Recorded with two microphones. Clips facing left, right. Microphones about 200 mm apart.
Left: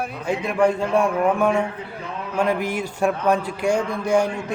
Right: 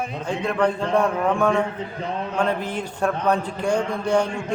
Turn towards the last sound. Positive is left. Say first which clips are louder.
# left 1 dB
turn(degrees=10)  # may be behind; listen again after turning